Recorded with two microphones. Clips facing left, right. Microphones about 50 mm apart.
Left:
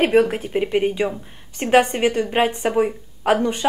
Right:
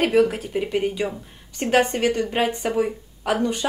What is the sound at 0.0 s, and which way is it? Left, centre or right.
A woman's voice, left.